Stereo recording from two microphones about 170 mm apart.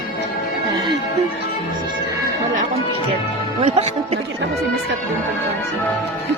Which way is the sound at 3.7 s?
40° right (ahead or behind).